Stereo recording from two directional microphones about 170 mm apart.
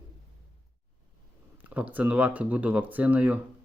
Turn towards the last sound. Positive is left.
turn(degrees=-10)  # may be behind; listen again after turning